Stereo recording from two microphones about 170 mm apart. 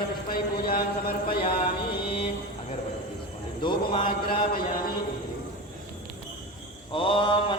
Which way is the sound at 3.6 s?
30° left (ahead or behind).